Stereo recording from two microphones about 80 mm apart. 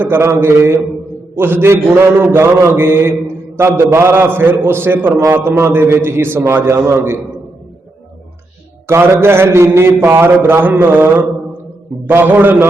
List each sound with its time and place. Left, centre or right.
0.0 s a man's voice: right
8.9 s a man's voice: right